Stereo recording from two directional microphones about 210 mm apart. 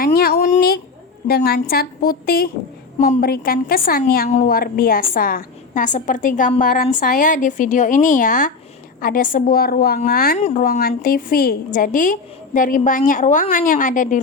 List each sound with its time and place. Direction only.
0.0 s a sound: 45° left (ahead or behind)
1.3 s a woman's voice: 50° left (ahead or behind)
10.3 s a woman's voice: 35° left (ahead or behind)